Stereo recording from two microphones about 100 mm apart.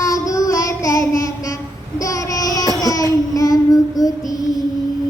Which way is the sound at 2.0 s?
35° left (ahead or behind).